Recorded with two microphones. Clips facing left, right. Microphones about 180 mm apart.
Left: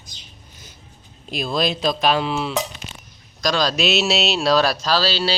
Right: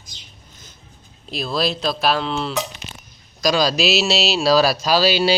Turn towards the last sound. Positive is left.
turn(degrees=-10)  # may be behind; listen again after turning